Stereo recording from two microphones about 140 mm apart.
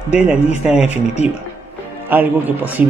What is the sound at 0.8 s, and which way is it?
Speech, 50° left (ahead or behind).